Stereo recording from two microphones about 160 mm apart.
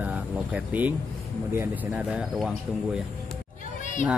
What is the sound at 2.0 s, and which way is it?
Speech, 5° right (ahead or behind).